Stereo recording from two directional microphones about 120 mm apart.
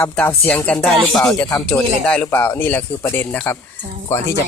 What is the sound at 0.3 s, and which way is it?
Speech, 10° left (ahead or behind).